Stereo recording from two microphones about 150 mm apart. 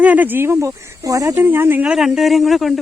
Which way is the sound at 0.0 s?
10° right (ahead or behind).